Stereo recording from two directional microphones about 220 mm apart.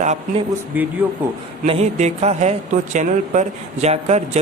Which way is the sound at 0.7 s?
10° right (ahead or behind).